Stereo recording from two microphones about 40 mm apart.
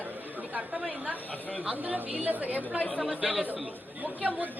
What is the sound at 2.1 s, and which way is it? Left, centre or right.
Speech, right.